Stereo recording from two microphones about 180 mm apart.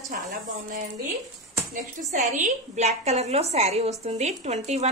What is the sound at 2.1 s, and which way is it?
A woman's voice, 40° right (ahead or behind).